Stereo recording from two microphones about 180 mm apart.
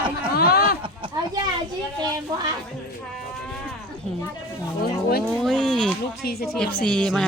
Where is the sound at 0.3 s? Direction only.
55° left (ahead or behind).